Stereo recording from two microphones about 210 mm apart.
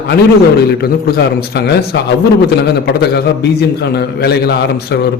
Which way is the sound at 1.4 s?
50° left (ahead or behind).